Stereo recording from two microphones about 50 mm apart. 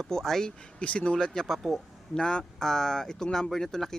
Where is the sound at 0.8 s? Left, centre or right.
Left.